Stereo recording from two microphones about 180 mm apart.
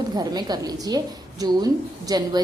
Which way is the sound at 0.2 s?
20° right (ahead or behind).